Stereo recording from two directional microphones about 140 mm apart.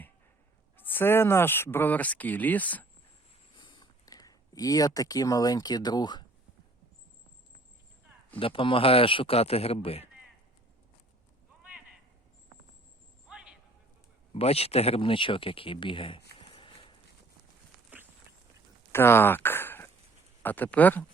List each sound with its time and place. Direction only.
0.8 s speech: 15° left (ahead or behind)
3.5 s speech: 35° left (ahead or behind)
8.4 s speech: 40° left (ahead or behind)
13.3 s a sound: 5° right (ahead or behind)
14.3 s speech: 45° left (ahead or behind)
17.9 s a sound: 10° right (ahead or behind)
18.9 s speech: 15° left (ahead or behind)